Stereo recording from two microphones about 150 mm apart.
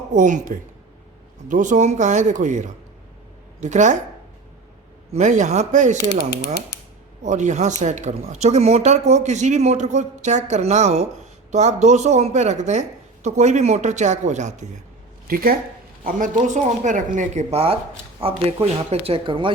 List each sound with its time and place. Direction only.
0.1 s speech: 55° right (ahead or behind)
5.1 s speech: 55° right (ahead or behind)
7.2 s speech: 55° right (ahead or behind)
16.0 s speech: 60° right (ahead or behind); by 19.5 s 35° right (ahead or behind)